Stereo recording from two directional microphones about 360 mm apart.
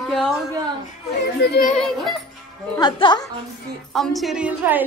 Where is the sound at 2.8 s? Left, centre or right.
Centre.